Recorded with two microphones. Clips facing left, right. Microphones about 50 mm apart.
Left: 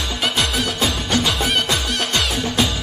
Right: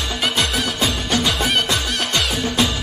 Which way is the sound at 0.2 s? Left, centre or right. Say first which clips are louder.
Even; centre.